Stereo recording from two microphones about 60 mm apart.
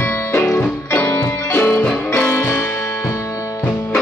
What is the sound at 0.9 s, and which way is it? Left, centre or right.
Music, left.